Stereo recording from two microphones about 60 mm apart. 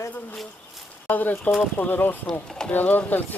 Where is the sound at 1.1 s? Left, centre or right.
Left.